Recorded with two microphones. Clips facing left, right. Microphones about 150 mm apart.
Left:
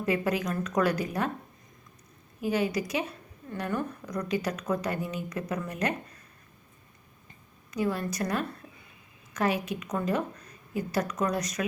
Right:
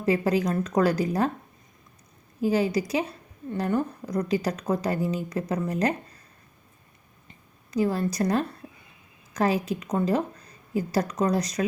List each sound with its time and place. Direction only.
0.0 s speech: 35° right (ahead or behind)
2.4 s speech: 35° right (ahead or behind)
7.7 s speech: 35° right (ahead or behind)